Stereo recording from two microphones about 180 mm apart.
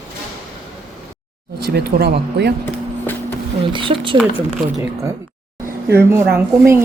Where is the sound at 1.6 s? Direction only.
65° right (ahead or behind).